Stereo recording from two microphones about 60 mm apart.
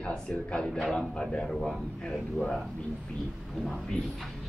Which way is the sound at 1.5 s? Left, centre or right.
Centre.